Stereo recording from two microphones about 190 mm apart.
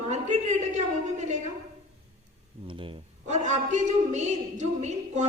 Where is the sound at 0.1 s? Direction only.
40° right (ahead or behind).